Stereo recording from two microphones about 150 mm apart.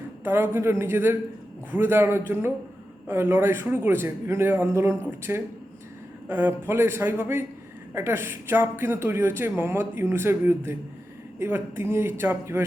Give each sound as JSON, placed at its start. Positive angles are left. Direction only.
{"t": 0.3, "sound": "speech", "side_deg": -15}